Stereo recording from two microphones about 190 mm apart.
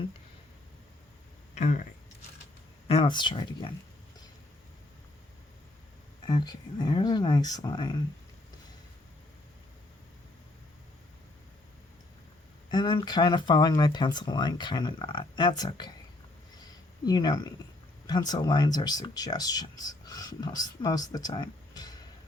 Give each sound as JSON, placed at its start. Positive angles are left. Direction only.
{"t": 1.5, "sound": "speech", "side_deg": 40}
{"t": 2.8, "sound": "speech", "side_deg": 25}
{"t": 6.2, "sound": "speech", "side_deg": 20}
{"t": 12.7, "sound": "speech", "side_deg": 20}
{"t": 17.1, "sound": "speech", "side_deg": 20}